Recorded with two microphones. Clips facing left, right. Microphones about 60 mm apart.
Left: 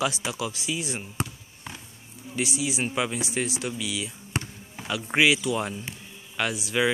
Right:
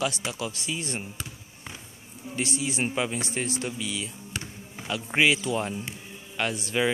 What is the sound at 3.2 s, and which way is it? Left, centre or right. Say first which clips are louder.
Speech: left 1 dB; centre.